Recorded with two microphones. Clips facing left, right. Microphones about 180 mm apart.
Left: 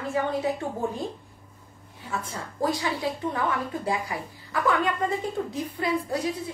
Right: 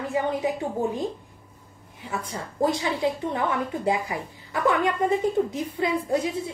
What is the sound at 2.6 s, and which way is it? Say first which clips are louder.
A woman's voice: right 3 dB; 20° right (ahead or behind).